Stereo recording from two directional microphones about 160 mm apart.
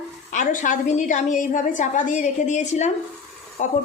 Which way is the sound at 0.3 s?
55° left (ahead or behind).